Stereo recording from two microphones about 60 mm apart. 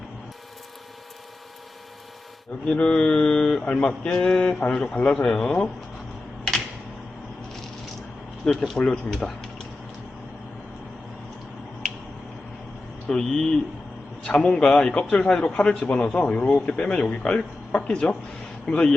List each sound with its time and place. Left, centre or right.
2.6 s a man's voice: centre
8.4 s speech: centre
13.1 s a man's voice: centre